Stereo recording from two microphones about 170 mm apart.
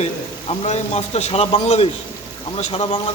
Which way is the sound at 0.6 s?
40° left (ahead or behind).